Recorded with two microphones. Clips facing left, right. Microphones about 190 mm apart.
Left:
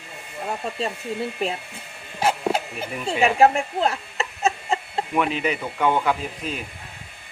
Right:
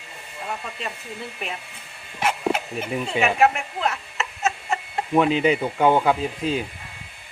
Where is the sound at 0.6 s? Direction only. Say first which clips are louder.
Left 6 dB; 30° left (ahead or behind).